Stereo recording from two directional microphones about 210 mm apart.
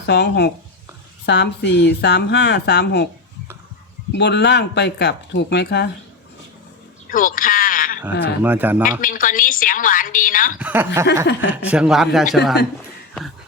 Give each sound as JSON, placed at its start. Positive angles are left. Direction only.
{"t": 0.0, "sound": "speech", "side_deg": 55}
{"t": 4.1, "sound": "speech", "side_deg": 55}
{"t": 7.1, "sound": "sheep", "side_deg": 40}
{"t": 8.1, "sound": "speech", "side_deg": 50}
{"t": 8.4, "sound": "speech", "side_deg": -10}
{"t": 8.8, "sound": "a woman's voice", "side_deg": 40}
{"t": 10.6, "sound": "a man's voice", "side_deg": -10}